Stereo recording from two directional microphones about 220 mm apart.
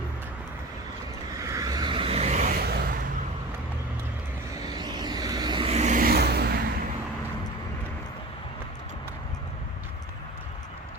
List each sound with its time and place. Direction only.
1.4 s vehicle: 15° right (ahead or behind); by 2.5 s 30° right (ahead or behind)
2.6 s vehicle: 45° right (ahead or behind)
4.5 s vehicle: 15° right (ahead or behind); by 6.6 s 45° right (ahead or behind)